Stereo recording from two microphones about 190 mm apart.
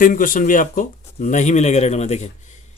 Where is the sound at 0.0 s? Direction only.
45° left (ahead or behind).